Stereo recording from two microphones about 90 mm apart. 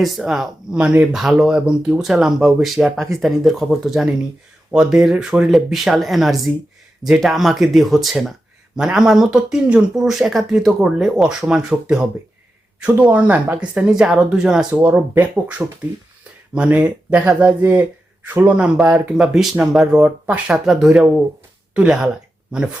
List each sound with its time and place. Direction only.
0.0 s speech: centre (ahead or behind)
14.8 s speech: 20° right (ahead or behind)